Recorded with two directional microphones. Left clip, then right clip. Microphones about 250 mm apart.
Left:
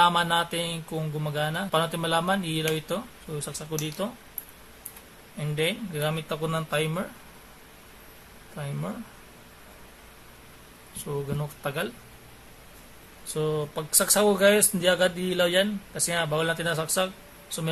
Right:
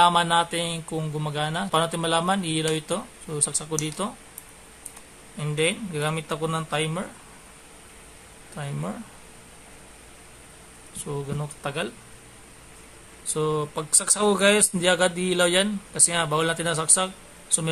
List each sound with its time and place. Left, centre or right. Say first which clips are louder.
0.0 s mantra: right 3 dB; centre
5.4 s mantra: right 3 dB; centre
8.6 s mantra: right 2 dB; centre
11.0 s mantra: even; centre
13.3 s mantra: right 3 dB; centre